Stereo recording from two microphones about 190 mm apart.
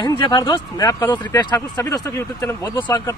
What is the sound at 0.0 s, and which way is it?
Speech, 20° left (ahead or behind).